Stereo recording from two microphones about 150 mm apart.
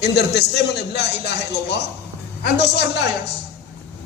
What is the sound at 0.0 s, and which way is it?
A man's voice, 90° left.